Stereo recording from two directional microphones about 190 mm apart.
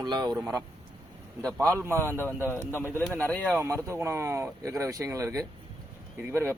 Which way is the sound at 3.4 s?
10° right (ahead or behind).